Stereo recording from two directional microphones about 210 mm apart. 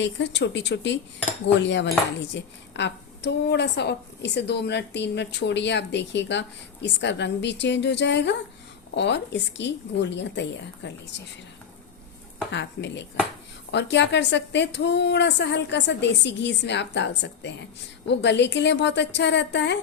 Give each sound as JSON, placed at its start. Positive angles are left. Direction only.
{"t": 0.0, "sound": "a woman's voice", "side_deg": 60}
{"t": 12.5, "sound": "a woman's voice", "side_deg": 55}